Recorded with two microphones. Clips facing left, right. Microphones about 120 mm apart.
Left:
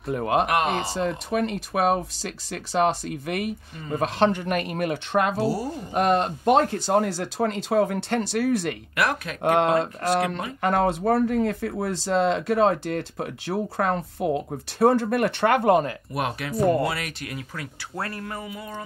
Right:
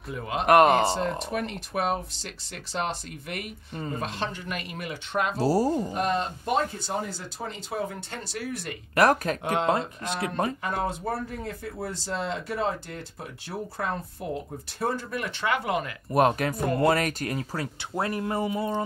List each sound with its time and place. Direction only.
0.1 s speech: 60° left (ahead or behind)
0.5 s speech: 50° right (ahead or behind)
1.4 s speech: 80° left
1.9 s speech: 60° left (ahead or behind)
5.4 s speech: 40° right (ahead or behind)
5.9 s speech: 65° left (ahead or behind)
8.9 s speech: 40° right (ahead or behind)
9.4 s speech: 60° left (ahead or behind)
10.0 s speech: 75° left (ahead or behind)
14.8 s speech: 65° left (ahead or behind); by 15.9 s 45° left (ahead or behind)
16.1 s speech: 40° right (ahead or behind)
17.9 s speech: 20° right (ahead or behind)